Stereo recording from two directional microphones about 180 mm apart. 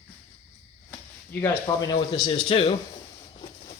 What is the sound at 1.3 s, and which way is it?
Speech, 20° left (ahead or behind).